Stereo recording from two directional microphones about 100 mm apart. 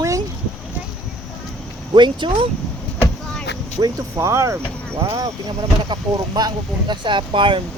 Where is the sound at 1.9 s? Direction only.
50° right (ahead or behind).